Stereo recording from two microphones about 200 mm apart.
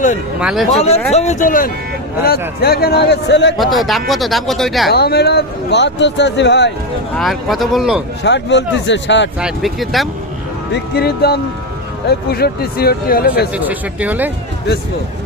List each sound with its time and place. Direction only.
0.3 s speech: centre (ahead or behind)
0.8 s speech: 30° left (ahead or behind); by 3.5 s 60° left (ahead or behind)
3.6 s speech: centre (ahead or behind)
4.9 s speech: 50° left (ahead or behind)
7.2 s speech: centre (ahead or behind)
8.2 s speech: 60° left (ahead or behind)
9.4 s speech: centre (ahead or behind)
10.9 s speech: 55° left (ahead or behind)
13.5 s speech: 10° right (ahead or behind)